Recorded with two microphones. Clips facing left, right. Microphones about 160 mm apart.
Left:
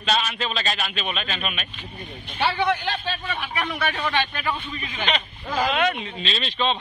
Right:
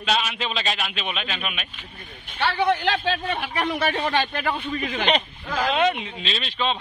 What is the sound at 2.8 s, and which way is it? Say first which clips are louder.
Speech: right 5 dB; 70° right (ahead or behind).